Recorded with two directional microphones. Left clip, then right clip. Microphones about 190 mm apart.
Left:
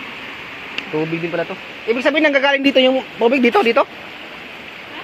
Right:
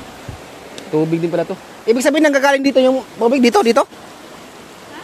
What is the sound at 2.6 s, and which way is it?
Speech, 10° right (ahead or behind).